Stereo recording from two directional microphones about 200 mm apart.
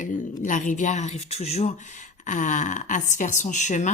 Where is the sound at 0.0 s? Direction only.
40° left (ahead or behind).